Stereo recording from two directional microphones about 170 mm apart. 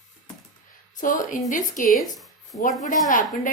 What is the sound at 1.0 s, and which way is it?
A woman's voice, 50° left (ahead or behind).